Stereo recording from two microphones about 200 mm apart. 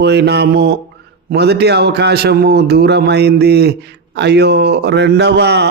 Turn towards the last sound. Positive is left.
turn(degrees=-55)  # may be behind; listen again after turning